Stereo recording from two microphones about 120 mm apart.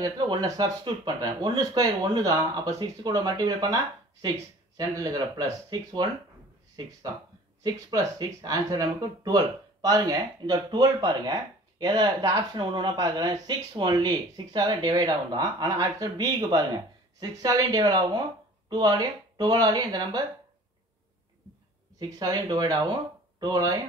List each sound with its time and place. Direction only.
0.0 s speech: 35° right (ahead or behind)
7.6 s speech: 35° right (ahead or behind)
21.9 s speech: 30° right (ahead or behind)